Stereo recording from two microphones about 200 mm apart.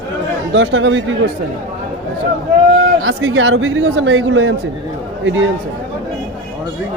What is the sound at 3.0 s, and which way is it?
A man's voice, 85° right.